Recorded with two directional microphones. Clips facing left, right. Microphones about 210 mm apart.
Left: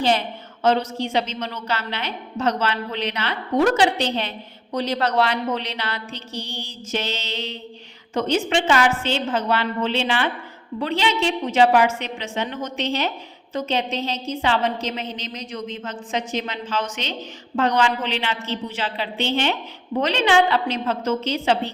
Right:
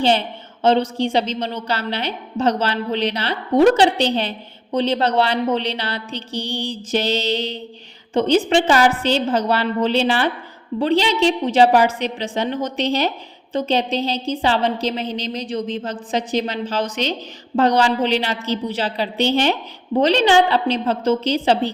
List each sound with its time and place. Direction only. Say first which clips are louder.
0.0 s a woman's voice: right 3 dB; 30° right (ahead or behind)